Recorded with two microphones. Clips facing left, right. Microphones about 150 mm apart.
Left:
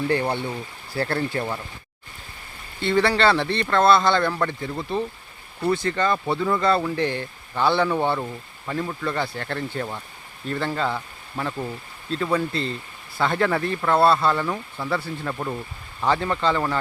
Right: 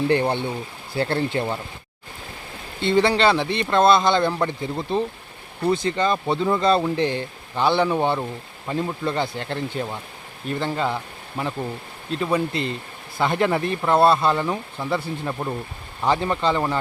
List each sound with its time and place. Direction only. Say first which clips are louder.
0.1 s speech: right 3 dB; 25° right (ahead or behind)
2.8 s speech: right 1 dB; 20° right (ahead or behind)